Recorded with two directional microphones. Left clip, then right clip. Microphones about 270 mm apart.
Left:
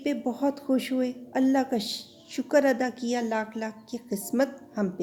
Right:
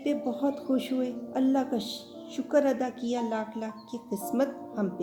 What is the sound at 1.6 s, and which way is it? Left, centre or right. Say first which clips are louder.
A woman's voice: left 3 dB; left.